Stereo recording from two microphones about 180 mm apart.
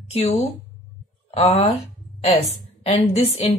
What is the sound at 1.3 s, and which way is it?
Speech, 35° left (ahead or behind).